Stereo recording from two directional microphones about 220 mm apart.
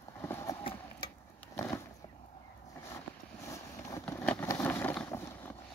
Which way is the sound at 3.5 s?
15° left (ahead or behind).